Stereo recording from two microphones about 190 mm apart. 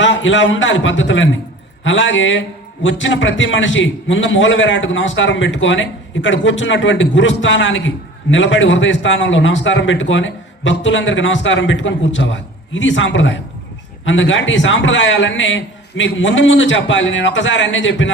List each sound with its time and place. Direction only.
0.0 s a man's voice: 80° left